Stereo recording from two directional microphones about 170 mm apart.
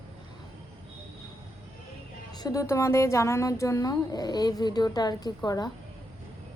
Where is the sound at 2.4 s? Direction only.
20° left (ahead or behind).